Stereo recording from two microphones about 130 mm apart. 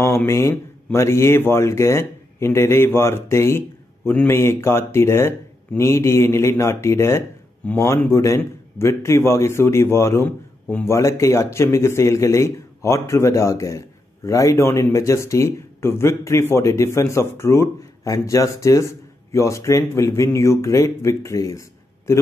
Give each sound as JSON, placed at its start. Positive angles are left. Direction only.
{"t": 0.0, "sound": "a man's voice", "side_deg": 20}